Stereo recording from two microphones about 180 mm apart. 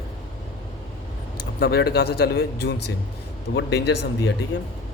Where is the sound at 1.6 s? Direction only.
60° left (ahead or behind); by 2.9 s 80° left.